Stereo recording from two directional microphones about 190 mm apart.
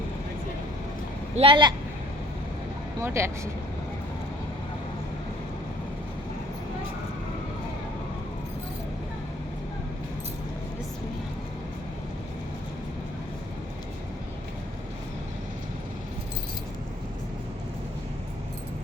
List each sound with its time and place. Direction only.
1.4 s speech: 25° right (ahead or behind)
3.0 s speech: 15° right (ahead or behind)